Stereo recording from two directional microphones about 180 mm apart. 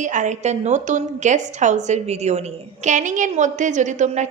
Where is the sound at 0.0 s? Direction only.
45° right (ahead or behind).